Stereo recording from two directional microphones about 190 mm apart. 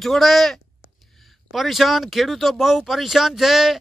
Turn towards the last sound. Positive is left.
turn(degrees=0)  # may be behind; listen again after turning